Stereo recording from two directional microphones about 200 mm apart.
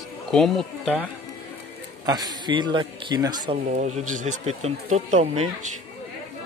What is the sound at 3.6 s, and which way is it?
Speech, 35° right (ahead or behind).